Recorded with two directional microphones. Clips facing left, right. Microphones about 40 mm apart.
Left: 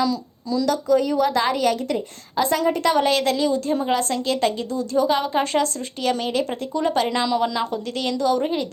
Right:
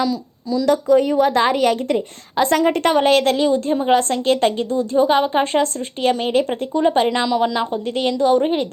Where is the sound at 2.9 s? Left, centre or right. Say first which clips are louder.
Right 4 dB; right.